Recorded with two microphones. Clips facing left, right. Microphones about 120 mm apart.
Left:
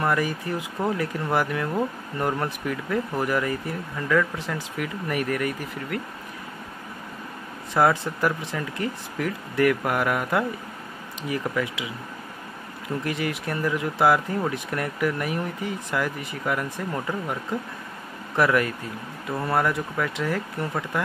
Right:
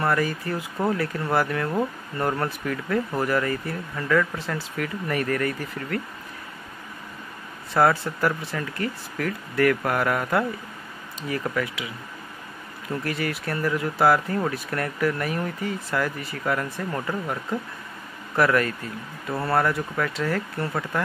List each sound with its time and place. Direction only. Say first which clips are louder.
0.0 s speech: even; 15° left (ahead or behind)
7.7 s speech: even; 15° left (ahead or behind)
13.0 s speech: even; 20° left (ahead or behind)
18.3 s speech: even; 15° left (ahead or behind)